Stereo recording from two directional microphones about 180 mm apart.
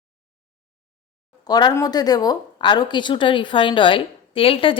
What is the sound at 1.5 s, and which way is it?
Speech, 25° left (ahead or behind).